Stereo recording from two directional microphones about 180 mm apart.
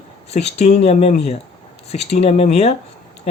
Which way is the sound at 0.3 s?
35° left (ahead or behind).